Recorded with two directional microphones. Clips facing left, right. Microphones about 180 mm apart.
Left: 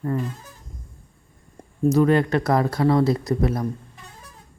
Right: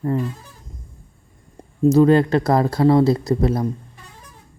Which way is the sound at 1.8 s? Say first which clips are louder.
Right 4 dB; 30° right (ahead or behind).